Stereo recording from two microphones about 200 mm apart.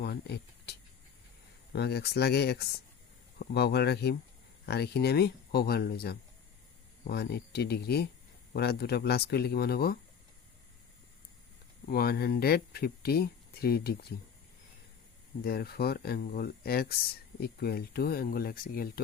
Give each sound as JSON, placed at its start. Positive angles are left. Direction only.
{"t": 0.0, "sound": "speech", "side_deg": 55}
{"t": 11.9, "sound": "speech", "side_deg": 50}
{"t": 15.4, "sound": "speech", "side_deg": 50}